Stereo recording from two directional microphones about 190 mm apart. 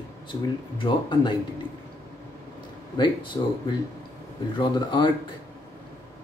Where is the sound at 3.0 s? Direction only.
25° left (ahead or behind).